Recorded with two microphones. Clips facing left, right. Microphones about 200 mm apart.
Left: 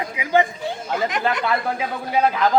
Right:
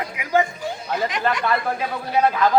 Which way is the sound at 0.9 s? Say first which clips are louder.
Even; 55° left (ahead or behind).